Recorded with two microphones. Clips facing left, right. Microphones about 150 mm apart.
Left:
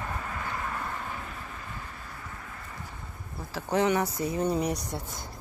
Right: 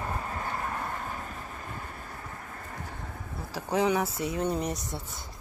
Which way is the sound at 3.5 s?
5° right (ahead or behind).